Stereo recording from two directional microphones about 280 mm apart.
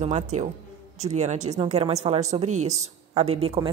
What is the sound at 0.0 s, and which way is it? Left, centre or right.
A woman's voice, right.